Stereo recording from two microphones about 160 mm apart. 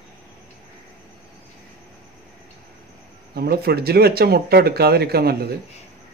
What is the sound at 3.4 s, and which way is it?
Speech, 75° right (ahead or behind).